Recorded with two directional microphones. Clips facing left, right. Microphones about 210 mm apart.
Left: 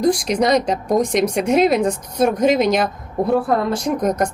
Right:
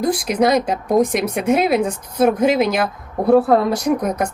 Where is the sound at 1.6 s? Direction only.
Centre (ahead or behind).